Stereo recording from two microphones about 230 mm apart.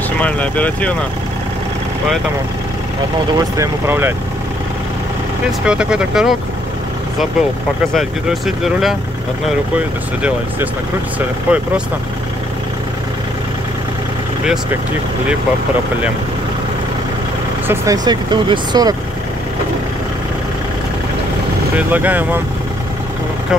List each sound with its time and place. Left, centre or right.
0.2 s speech: centre
3.3 s speech: centre
5.7 s speech: centre
7.9 s speech: centre
11.1 s speech: centre
17.6 s speech: centre
21.7 s speech: centre